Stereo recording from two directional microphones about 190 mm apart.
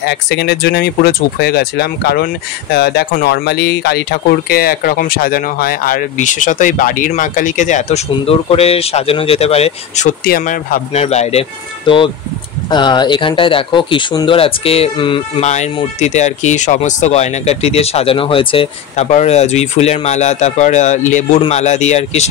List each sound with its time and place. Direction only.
0.0 s speech: 65° left (ahead or behind); by 10.1 s 35° left (ahead or behind)
10.2 s speech: 45° left (ahead or behind)